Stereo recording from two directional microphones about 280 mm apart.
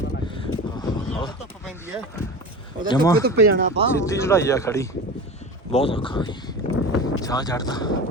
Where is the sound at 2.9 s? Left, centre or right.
Centre.